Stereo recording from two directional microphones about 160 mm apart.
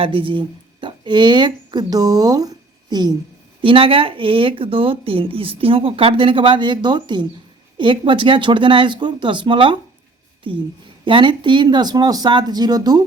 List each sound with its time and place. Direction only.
0.0 s a woman's voice: 35° right (ahead or behind)